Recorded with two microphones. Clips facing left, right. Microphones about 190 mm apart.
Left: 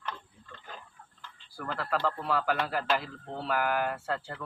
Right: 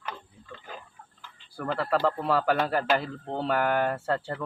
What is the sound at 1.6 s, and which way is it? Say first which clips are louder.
Speech: right 5 dB; 35° right (ahead or behind).